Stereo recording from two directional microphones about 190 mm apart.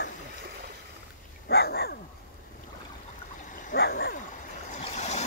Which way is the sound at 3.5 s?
50° left (ahead or behind).